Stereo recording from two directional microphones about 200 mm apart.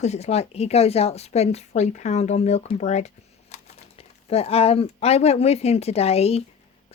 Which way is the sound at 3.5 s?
35° left (ahead or behind).